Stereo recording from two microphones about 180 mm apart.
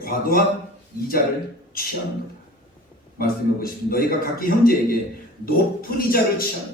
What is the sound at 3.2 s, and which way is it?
A man's voice, 55° left (ahead or behind).